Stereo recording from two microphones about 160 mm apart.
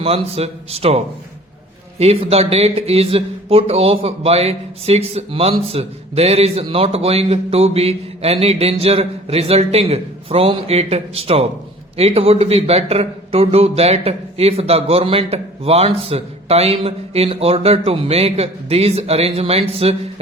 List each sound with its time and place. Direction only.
0.0 s speech: 40° right (ahead or behind)